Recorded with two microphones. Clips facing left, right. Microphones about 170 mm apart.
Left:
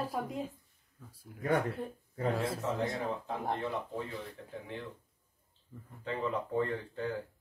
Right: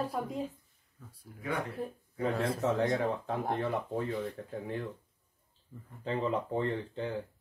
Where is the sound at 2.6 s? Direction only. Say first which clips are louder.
Right 5 dB; 60° right (ahead or behind).